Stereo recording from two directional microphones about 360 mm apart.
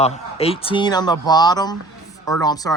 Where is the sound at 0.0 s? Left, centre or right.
Centre.